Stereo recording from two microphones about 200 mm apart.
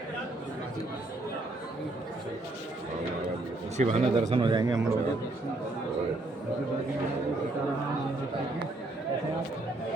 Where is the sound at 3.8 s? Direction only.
30° right (ahead or behind); by 5.0 s 15° right (ahead or behind).